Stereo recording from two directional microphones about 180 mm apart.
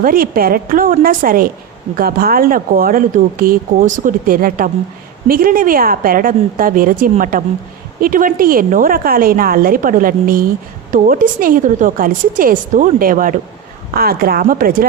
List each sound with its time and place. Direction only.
0.0 s speech: 55° right (ahead or behind)